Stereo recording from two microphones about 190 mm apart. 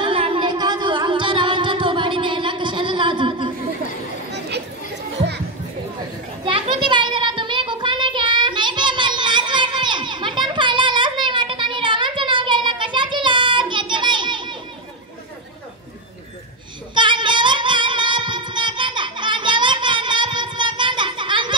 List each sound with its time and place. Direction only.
0.0 s music: 30° right (ahead or behind)
4.3 s a sound: 60° right (ahead or behind)
6.4 s child singing: 25° right (ahead or behind)
16.9 s music: 25° right (ahead or behind)